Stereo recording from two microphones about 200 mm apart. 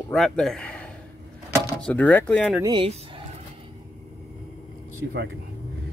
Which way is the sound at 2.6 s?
25° right (ahead or behind).